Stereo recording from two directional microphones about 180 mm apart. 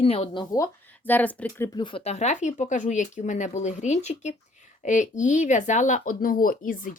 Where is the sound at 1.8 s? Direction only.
30° left (ahead or behind); by 7.0 s 50° left (ahead or behind).